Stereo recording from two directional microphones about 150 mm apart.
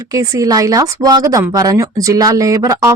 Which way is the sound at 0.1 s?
25° right (ahead or behind).